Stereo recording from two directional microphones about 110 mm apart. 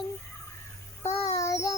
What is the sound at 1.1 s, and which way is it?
Child singing, 30° left (ahead or behind).